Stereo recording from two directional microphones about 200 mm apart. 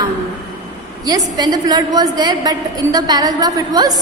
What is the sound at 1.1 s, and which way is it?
A woman's voice, 20° right (ahead or behind).